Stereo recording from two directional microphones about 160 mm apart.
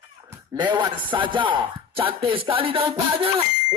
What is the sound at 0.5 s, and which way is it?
Speech, 30° right (ahead or behind).